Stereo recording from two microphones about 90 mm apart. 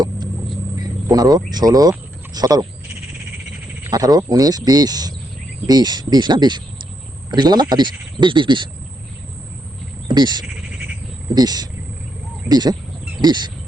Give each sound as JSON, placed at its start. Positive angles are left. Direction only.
{"t": 1.0, "sound": "speech", "side_deg": -45}
{"t": 3.9, "sound": "speech", "side_deg": -45}
{"t": 10.1, "sound": "speech", "side_deg": -50}